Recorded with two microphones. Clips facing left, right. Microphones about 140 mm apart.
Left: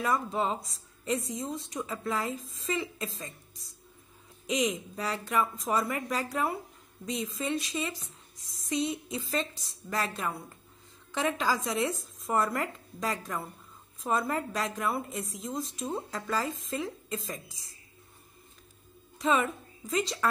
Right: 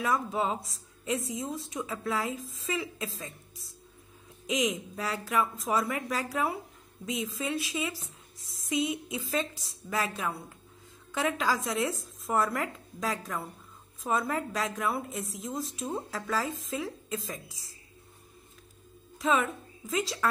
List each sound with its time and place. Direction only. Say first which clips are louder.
0.0 s a woman's voice: even; centre (ahead or behind)
4.5 s a woman's voice: even; centre (ahead or behind)
19.1 s a woman's voice: even; centre (ahead or behind)